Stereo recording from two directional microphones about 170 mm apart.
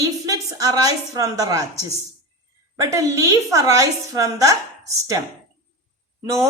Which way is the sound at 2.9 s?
20° right (ahead or behind).